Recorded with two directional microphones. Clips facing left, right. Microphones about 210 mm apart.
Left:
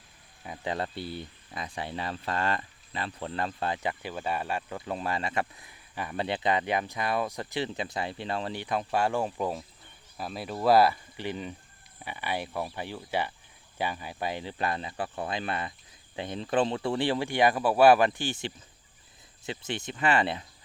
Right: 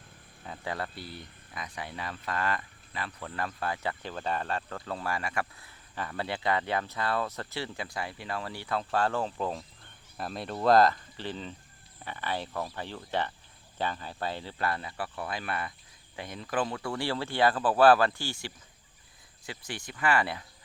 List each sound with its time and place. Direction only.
0.4 s speech: 15° left (ahead or behind)
4.0 s speech: 10° left (ahead or behind)